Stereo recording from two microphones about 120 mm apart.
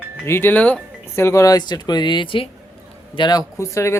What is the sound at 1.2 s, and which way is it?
Speech, 25° left (ahead or behind).